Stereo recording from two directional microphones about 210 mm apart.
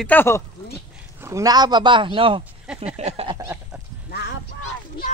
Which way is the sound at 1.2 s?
15° right (ahead or behind).